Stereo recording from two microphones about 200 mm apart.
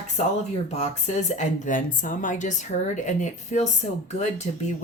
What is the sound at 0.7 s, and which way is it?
Speech, 35° left (ahead or behind).